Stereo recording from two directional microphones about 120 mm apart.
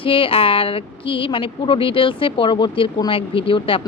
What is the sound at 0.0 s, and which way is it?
Speech, 45° left (ahead or behind).